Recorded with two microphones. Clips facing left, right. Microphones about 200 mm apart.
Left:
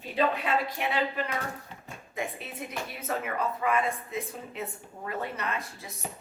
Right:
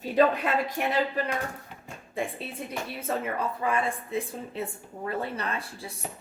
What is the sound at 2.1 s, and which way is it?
A woman's voice, 30° right (ahead or behind).